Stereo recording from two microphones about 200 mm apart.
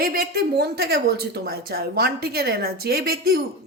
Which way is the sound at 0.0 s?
50° right (ahead or behind).